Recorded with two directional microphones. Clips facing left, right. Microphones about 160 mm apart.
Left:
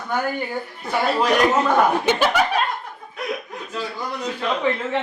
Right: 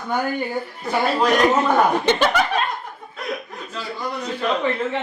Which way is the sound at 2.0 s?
10° left (ahead or behind).